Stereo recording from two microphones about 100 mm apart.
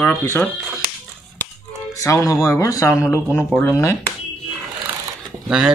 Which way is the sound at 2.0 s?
35° left (ahead or behind).